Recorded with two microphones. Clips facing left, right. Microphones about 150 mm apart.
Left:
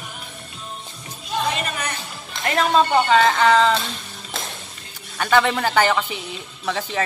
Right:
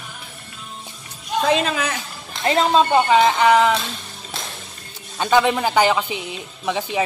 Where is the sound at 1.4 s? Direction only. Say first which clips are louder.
Right 6 dB; 90° right.